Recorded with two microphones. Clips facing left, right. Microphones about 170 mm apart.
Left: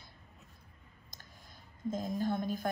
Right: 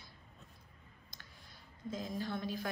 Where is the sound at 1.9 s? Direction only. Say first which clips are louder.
Left 6 dB; 50° left (ahead or behind).